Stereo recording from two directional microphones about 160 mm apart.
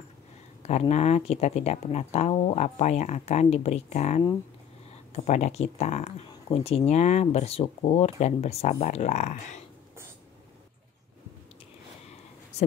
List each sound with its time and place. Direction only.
0.6 s speech: 45° left (ahead or behind)